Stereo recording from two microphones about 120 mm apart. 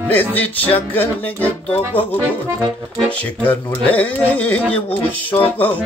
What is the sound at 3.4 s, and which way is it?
Music, 15° left (ahead or behind).